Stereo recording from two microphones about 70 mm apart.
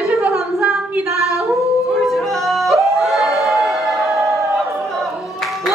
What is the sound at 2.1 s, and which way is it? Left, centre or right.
Music, centre.